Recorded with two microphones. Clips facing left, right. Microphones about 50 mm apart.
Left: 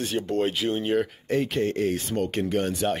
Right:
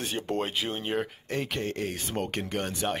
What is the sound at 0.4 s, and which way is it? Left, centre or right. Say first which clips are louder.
Speech: left 6 dB; centre.